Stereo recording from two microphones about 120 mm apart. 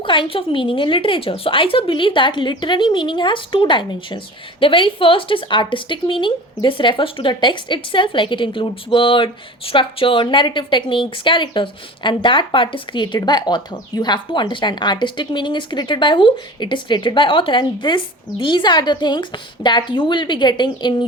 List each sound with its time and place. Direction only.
0.0 s a woman's voice: 45° left (ahead or behind)